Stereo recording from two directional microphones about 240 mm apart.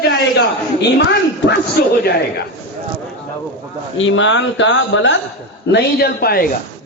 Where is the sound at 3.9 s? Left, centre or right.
Left.